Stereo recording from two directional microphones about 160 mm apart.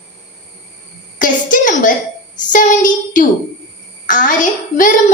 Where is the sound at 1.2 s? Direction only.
55° left (ahead or behind).